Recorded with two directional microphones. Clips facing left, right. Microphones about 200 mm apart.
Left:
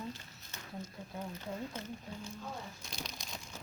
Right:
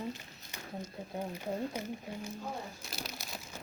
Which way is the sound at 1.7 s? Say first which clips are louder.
Right 5 dB; 10° right (ahead or behind).